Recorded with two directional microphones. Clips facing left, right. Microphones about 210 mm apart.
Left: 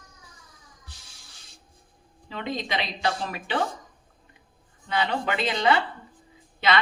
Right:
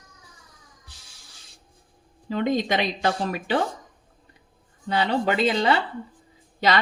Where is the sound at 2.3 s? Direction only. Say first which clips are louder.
Right 7 dB; 45° right (ahead or behind).